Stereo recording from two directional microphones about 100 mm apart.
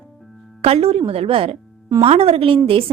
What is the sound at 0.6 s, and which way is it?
A woman's voice, 85° right.